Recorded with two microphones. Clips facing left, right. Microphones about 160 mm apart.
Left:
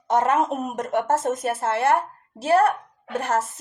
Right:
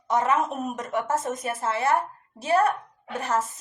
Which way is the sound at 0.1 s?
60° left (ahead or behind).